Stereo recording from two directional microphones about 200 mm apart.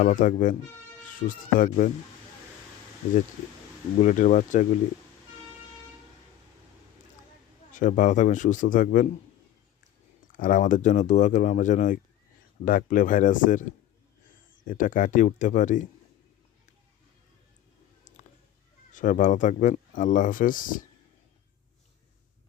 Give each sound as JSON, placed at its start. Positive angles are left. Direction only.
{"t": 0.0, "sound": "speech", "side_deg": 40}
{"t": 4.0, "sound": "speech", "side_deg": 40}
{"t": 7.7, "sound": "speech", "side_deg": 40}
{"t": 10.3, "sound": "speech", "side_deg": 40}
{"t": 18.9, "sound": "speech", "side_deg": 40}